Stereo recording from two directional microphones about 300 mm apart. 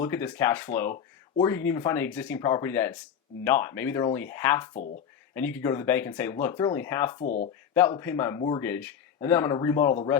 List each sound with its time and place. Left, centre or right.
0.0 s speech: centre
7.2 s speech: left
7.7 s speech: centre